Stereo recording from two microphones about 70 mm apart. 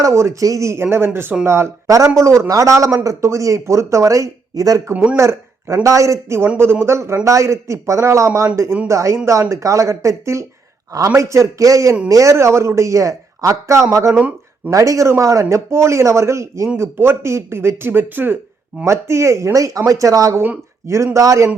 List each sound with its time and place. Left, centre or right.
0.0 s a man's voice: right
5.1 s a man's voice: right
14.1 s a sound: centre
14.7 s a man's voice: right
18.9 s a man's voice: right
19.5 s a man's voice: right